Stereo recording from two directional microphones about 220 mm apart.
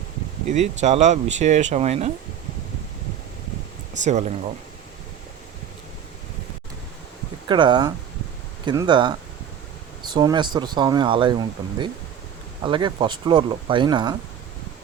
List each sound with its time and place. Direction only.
0.4 s speech: 30° right (ahead or behind)
4.0 s speech: 30° right (ahead or behind)
7.4 s speech: 20° right (ahead or behind)